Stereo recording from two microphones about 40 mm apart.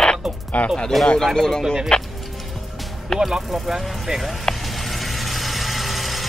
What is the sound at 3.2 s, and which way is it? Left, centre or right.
Speech, centre.